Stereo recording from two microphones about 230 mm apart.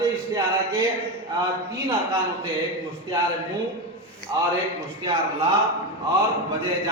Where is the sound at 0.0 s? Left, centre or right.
Centre.